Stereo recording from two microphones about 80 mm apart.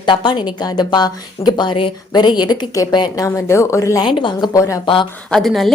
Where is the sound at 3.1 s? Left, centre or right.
Left.